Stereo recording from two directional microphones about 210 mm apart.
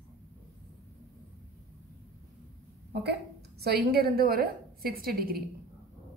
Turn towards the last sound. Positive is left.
turn(degrees=-45)  # may be behind; listen again after turning